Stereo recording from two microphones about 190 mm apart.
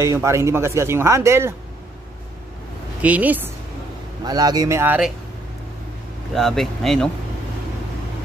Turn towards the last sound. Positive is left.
turn(degrees=0)  # may be behind; listen again after turning